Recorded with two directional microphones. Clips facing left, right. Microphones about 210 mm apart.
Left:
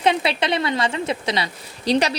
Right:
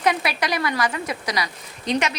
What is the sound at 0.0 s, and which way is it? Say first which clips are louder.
A woman's voice: left 3 dB; 25° left (ahead or behind).